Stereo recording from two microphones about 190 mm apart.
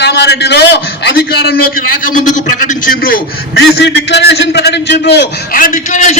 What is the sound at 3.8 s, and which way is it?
A man's voice, 65° left (ahead or behind).